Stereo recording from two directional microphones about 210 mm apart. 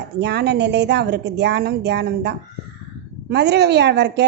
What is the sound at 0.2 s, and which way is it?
A woman's voice, 55° right (ahead or behind).